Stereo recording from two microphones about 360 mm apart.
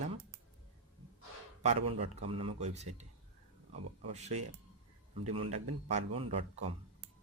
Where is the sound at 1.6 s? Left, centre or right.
Centre.